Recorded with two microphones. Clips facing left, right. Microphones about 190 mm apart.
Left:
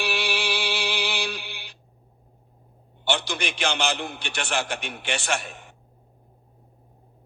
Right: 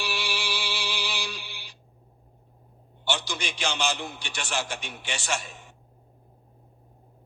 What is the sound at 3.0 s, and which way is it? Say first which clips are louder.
A man's voice: left 4 dB; 60° left (ahead or behind).